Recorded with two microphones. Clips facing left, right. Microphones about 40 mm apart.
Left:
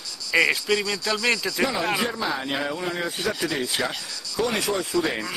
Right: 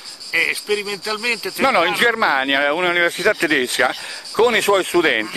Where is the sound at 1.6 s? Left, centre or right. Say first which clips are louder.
Right 12 dB; right.